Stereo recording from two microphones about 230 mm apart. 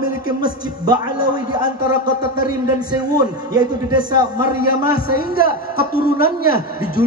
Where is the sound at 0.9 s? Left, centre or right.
Left.